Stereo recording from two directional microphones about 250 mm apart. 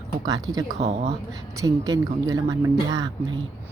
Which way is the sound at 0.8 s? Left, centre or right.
Right.